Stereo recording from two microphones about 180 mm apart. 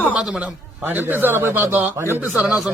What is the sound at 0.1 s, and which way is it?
A man's voice, 5° right (ahead or behind).